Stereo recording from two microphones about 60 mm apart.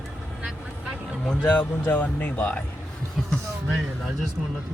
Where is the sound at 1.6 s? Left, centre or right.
Left.